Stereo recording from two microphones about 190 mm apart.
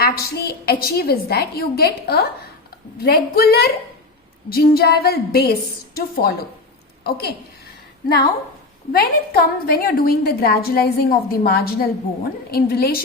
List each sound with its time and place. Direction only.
0.0 s a woman's voice: 55° left (ahead or behind)
8.9 s a woman's voice: 50° left (ahead or behind)